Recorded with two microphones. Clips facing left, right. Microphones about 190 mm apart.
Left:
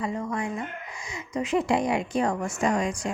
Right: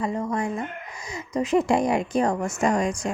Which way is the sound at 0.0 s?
40° right (ahead or behind).